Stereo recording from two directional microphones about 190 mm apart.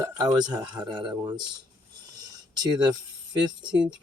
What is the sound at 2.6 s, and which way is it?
Speech, 20° right (ahead or behind).